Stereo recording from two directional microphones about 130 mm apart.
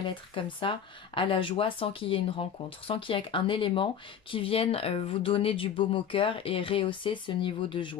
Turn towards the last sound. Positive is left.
turn(degrees=40)  # may be behind; listen again after turning